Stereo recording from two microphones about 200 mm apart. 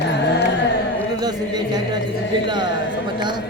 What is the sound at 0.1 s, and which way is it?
Carnatic music, 60° left (ahead or behind).